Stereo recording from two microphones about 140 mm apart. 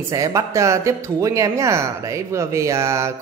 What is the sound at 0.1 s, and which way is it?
Speech, 25° right (ahead or behind).